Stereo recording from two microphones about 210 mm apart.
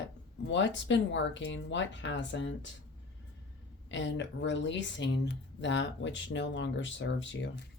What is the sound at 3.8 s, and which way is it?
Speech, 60° left (ahead or behind).